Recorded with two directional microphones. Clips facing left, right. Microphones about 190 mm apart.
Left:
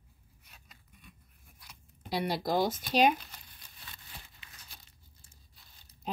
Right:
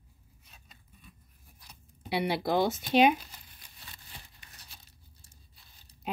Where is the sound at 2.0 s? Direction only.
60° right (ahead or behind).